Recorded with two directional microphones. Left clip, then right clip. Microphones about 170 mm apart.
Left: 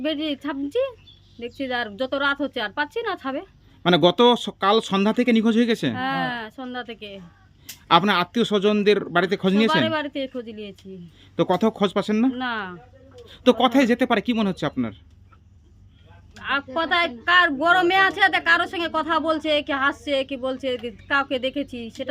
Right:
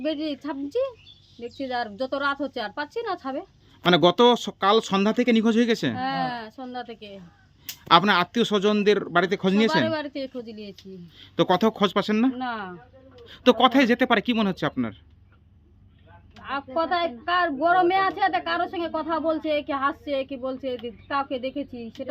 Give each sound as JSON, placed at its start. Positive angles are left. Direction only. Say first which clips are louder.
{"t": 0.0, "sound": "a woman's voice", "louder": "left 2 dB", "side_deg": 10}
{"t": 16.4, "sound": "a woman's voice", "louder": "left 3 dB", "side_deg": 15}